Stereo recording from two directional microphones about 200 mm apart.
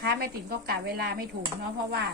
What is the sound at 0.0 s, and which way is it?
A woman's voice, 50° right (ahead or behind).